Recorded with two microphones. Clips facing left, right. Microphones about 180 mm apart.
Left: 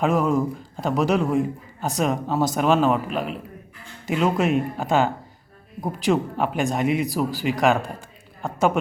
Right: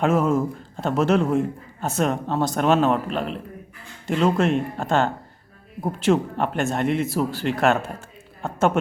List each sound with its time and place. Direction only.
0.0 s a man's voice: centre (ahead or behind)